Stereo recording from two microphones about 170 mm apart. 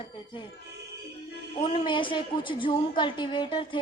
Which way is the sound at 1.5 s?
35° left (ahead or behind).